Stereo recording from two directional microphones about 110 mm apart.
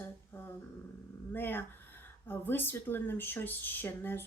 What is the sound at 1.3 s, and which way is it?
Speech, 20° left (ahead or behind).